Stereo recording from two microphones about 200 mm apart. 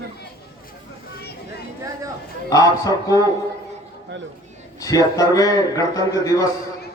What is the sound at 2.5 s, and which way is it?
Speech, 15° left (ahead or behind).